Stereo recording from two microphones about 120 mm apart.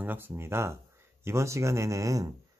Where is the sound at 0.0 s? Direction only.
20° right (ahead or behind).